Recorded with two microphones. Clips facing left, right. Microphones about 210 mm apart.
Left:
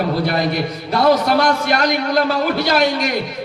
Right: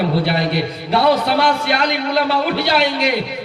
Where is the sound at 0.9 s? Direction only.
45° left (ahead or behind).